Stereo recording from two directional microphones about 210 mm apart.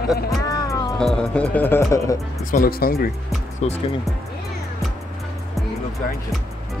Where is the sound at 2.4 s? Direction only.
40° left (ahead or behind).